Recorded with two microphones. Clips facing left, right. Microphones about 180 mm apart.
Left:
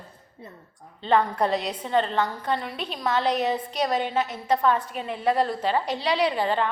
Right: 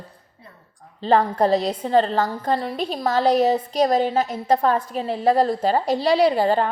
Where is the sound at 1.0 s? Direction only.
35° right (ahead or behind).